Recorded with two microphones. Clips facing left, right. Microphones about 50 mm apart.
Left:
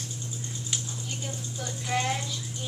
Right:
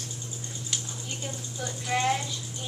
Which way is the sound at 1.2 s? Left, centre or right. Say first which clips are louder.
Right 3 dB; centre.